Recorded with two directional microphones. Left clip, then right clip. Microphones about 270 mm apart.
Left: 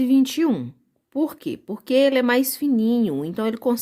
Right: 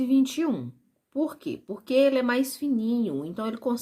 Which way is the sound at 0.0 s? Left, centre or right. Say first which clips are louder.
Left 5 dB; left.